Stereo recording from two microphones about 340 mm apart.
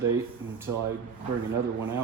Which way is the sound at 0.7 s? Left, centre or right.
Right.